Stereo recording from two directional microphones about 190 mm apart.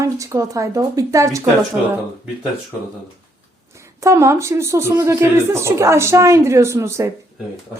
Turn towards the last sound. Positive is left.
turn(degrees=-15)  # may be behind; listen again after turning